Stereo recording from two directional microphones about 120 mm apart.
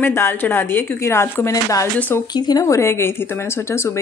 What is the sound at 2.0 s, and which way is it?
Speech, 15° left (ahead or behind).